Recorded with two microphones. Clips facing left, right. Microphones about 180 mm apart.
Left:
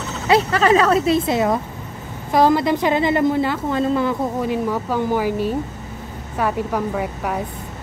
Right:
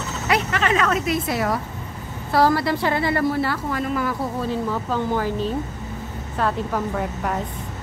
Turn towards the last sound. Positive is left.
turn(degrees=5)  # may be behind; listen again after turning